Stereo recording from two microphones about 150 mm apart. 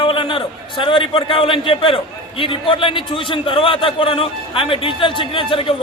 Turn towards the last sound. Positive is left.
turn(degrees=35)  # may be behind; listen again after turning